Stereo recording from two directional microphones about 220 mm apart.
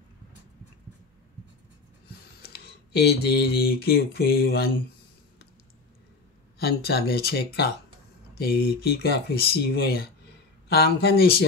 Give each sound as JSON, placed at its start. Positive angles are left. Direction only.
{"t": 2.0, "sound": "speech", "side_deg": 45}
{"t": 6.6, "sound": "speech", "side_deg": 45}